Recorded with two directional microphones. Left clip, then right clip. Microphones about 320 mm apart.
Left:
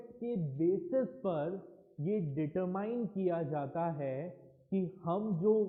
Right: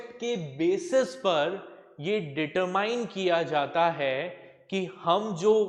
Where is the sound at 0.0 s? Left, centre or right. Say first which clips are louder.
Right 8 dB; centre.